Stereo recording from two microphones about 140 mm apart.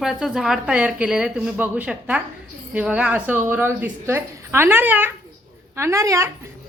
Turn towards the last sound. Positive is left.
turn(degrees=-20)  # may be behind; listen again after turning